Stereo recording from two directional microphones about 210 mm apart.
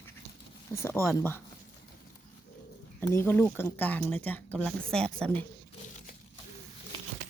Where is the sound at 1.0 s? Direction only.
10° left (ahead or behind).